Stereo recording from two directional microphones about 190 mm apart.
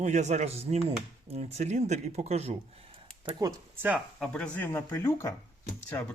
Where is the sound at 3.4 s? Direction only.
20° right (ahead or behind).